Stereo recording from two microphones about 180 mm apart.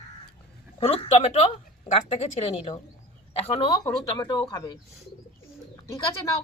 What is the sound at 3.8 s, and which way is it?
Speech, 20° left (ahead or behind).